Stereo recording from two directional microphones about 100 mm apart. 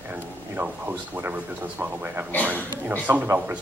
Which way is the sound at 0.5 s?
15° right (ahead or behind).